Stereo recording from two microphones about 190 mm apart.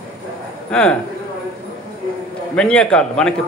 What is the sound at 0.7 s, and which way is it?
Speech, 5° left (ahead or behind).